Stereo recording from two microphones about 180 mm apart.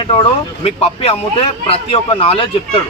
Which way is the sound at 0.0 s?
30° left (ahead or behind).